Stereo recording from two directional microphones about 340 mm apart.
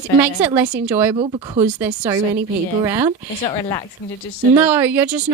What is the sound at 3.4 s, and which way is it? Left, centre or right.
Speech, centre.